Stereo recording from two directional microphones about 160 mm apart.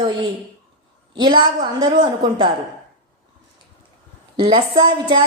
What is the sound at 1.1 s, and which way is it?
A woman's voice, 30° right (ahead or behind).